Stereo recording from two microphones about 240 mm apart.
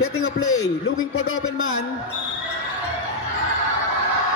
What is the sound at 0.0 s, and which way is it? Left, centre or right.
Speech, left.